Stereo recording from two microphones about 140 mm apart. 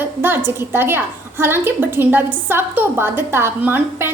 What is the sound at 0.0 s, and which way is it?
A woman's voice, 15° right (ahead or behind).